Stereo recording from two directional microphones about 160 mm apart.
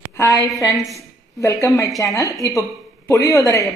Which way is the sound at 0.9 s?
20° left (ahead or behind).